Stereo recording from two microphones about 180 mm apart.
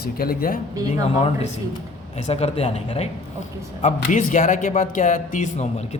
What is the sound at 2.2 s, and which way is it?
Speech, 35° left (ahead or behind).